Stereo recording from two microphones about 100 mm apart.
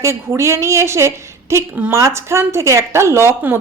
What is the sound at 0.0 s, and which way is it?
A woman's voice, 30° right (ahead or behind).